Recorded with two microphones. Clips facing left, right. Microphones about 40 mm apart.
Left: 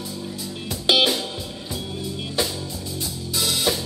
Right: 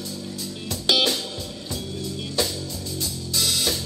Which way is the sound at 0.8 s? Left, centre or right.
Centre.